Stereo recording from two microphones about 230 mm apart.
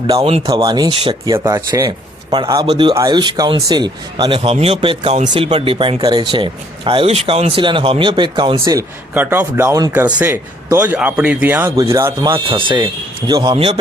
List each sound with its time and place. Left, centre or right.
0.1 s speech: right